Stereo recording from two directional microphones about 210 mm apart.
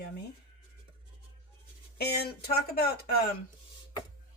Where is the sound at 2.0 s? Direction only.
50° left (ahead or behind).